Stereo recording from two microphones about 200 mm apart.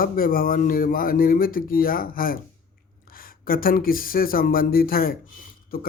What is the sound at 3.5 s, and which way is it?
Speech, 45° left (ahead or behind).